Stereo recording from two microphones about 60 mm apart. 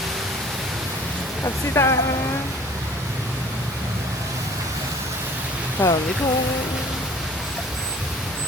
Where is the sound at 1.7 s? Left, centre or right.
Left.